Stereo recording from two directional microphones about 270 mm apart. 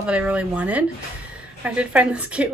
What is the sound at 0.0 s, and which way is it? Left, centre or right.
A woman's voice, centre.